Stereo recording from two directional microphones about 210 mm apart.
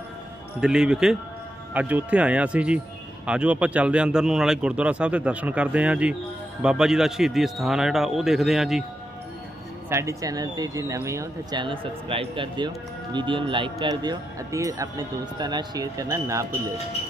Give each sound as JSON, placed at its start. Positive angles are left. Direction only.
{"t": 0.6, "sound": "speech", "side_deg": -5}
{"t": 9.8, "sound": "speech", "side_deg": -15}